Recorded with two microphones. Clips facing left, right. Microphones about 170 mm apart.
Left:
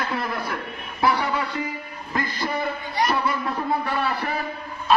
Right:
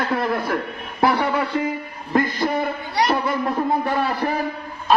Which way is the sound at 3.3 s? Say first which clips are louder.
Right 4 dB; 50° right (ahead or behind).